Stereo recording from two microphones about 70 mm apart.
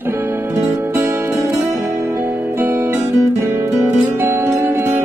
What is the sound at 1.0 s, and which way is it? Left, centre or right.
Music, right.